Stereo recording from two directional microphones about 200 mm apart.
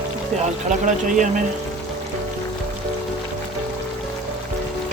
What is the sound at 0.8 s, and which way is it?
Speech, 40° right (ahead or behind).